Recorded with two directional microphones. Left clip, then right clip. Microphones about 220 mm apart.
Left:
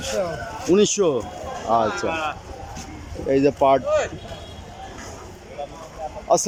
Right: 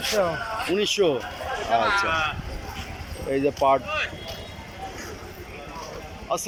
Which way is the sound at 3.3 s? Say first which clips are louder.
Left 4 dB; 15° left (ahead or behind).